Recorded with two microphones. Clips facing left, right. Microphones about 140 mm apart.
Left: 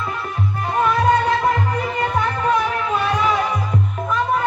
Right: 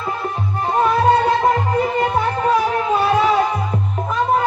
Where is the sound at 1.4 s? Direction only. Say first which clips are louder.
Right 3 dB; 30° right (ahead or behind).